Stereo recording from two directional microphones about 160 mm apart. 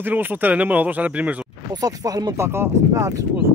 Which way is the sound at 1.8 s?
25° right (ahead or behind).